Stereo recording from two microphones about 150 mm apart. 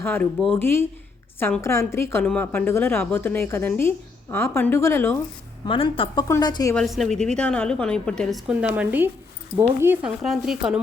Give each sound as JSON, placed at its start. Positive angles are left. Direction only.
{"t": 0.0, "sound": "a woman's voice", "side_deg": 15}
{"t": 0.3, "sound": "a woman's voice", "side_deg": 0}
{"t": 0.6, "sound": "a woman's voice", "side_deg": 15}
{"t": 5.6, "sound": "a woman's voice", "side_deg": 35}
{"t": 6.2, "sound": "a woman's voice", "side_deg": 25}
{"t": 6.7, "sound": "a woman's voice", "side_deg": 0}
{"t": 10.2, "sound": "a woman's voice", "side_deg": 0}